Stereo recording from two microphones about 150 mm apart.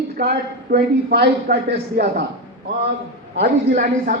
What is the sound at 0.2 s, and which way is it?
A man's voice, 90° right.